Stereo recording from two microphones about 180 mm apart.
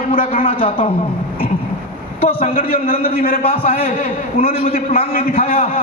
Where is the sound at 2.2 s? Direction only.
50° left (ahead or behind).